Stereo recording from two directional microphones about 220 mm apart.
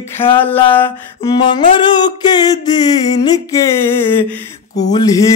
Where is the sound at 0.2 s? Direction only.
10° left (ahead or behind).